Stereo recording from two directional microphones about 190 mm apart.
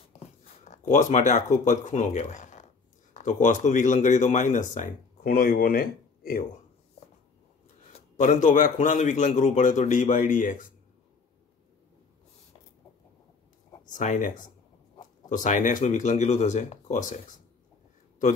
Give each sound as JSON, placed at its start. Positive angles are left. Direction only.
{"t": 0.7, "sound": "speech", "side_deg": 40}
{"t": 7.9, "sound": "speech", "side_deg": 40}
{"t": 13.8, "sound": "speech", "side_deg": 40}